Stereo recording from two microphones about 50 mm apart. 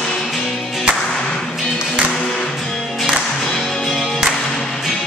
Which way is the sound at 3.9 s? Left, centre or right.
Centre.